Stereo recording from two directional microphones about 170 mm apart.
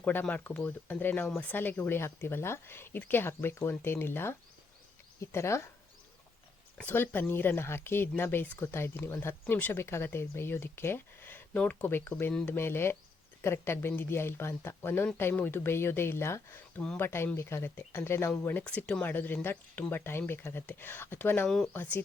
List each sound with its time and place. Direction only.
0.0 s speech: 10° left (ahead or behind)
6.7 s speech: 10° left (ahead or behind)